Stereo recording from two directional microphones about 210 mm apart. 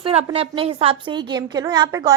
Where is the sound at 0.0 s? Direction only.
30° right (ahead or behind).